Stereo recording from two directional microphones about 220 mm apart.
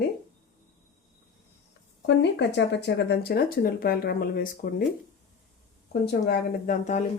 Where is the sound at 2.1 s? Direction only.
50° left (ahead or behind).